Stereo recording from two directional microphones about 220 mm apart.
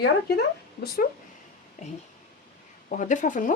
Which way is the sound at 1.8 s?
30° left (ahead or behind).